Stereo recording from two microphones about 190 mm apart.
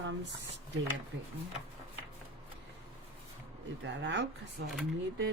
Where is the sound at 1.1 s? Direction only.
70° right (ahead or behind).